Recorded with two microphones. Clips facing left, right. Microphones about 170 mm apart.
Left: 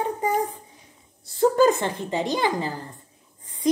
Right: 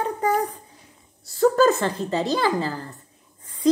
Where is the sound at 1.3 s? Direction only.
20° left (ahead or behind).